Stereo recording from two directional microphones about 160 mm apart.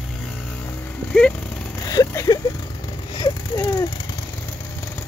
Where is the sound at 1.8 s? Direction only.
25° left (ahead or behind).